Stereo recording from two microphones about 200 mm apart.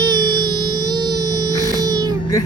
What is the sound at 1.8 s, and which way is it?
Music, 20° right (ahead or behind).